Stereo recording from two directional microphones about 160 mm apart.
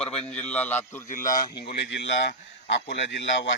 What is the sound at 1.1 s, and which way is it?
Speech, 60° left (ahead or behind).